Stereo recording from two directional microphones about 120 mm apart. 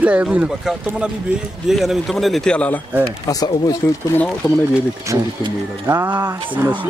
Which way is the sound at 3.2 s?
30° left (ahead or behind).